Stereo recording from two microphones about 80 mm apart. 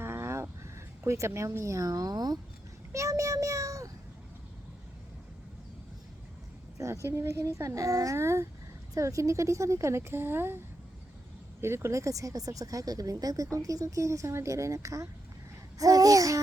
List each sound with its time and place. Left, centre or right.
0.0 s a sound: right
0.6 s speech: right
2.9 s a child's voice: right
6.7 s speech: right
11.6 s speech: right